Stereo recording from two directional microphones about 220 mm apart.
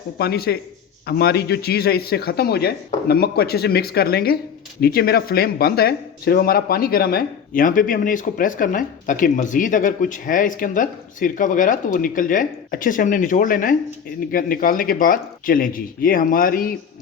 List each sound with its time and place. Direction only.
0.2 s speech: 45° left (ahead or behind)